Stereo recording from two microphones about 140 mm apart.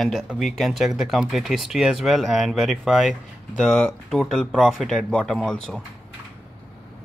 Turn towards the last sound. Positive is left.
turn(degrees=5)  # may be behind; listen again after turning